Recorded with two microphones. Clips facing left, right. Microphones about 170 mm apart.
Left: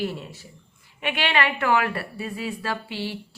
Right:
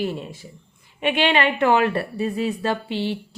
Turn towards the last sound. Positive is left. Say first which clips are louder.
# right 6 dB
turn(degrees=-20)  # may be behind; listen again after turning